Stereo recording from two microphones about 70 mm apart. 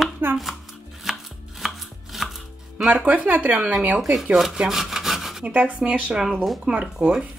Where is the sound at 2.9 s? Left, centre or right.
Centre.